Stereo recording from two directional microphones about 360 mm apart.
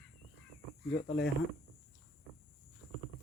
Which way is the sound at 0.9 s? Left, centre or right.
Left.